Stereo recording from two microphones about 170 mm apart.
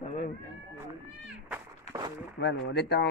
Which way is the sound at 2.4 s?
85° left.